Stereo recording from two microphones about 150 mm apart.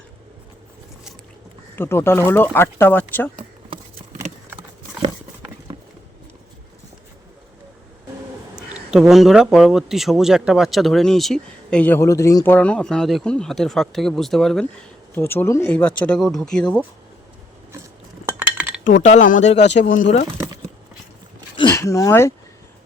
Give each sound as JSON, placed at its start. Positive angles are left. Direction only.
{"t": 1.7, "sound": "speech", "side_deg": 15}
{"t": 8.5, "sound": "speech", "side_deg": -5}
{"t": 12.5, "sound": "speech", "side_deg": 5}
{"t": 15.1, "sound": "speech", "side_deg": 15}
{"t": 18.5, "sound": "cutlery", "side_deg": -10}
{"t": 18.9, "sound": "speech", "side_deg": 55}
{"t": 21.5, "sound": "a sound", "side_deg": 30}
{"t": 21.8, "sound": "speech", "side_deg": 20}